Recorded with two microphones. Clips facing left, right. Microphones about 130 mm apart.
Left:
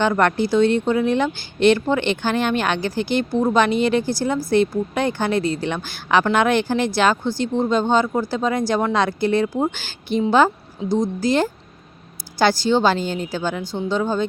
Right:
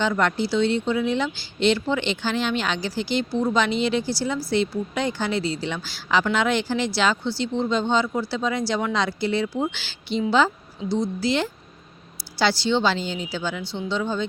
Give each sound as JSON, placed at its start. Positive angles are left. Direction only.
{"t": 0.0, "sound": "a woman's voice", "side_deg": 55}